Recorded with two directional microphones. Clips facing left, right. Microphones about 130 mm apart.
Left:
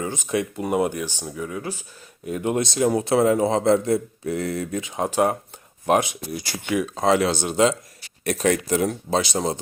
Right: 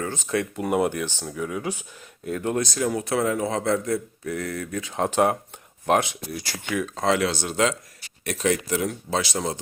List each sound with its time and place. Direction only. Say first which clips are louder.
0.0 s speech: left 1 dB; 15° left (ahead or behind)
0.5 s speech: even; centre (ahead or behind)
0.9 s speech: even; 10° left (ahead or behind)
2.2 s a man's voice: left 2 dB; 15° left (ahead or behind)
8.2 s speech: left 3 dB; 40° left (ahead or behind)
9.0 s a man's voice: left 3 dB; 20° left (ahead or behind)